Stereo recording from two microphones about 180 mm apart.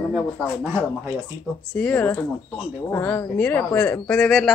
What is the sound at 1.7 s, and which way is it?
A woman's voice, 10° left (ahead or behind).